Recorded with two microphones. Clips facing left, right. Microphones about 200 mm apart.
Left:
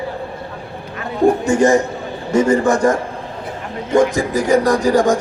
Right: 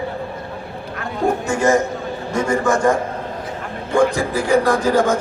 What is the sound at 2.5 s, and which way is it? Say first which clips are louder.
Speech: left 1 dB; 35° left (ahead or behind).